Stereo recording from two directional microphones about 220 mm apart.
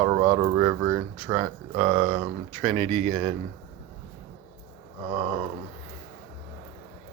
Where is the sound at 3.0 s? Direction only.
25° right (ahead or behind).